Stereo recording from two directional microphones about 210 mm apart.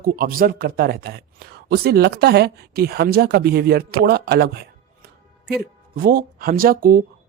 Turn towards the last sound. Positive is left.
turn(degrees=-45)  # may be behind; listen again after turning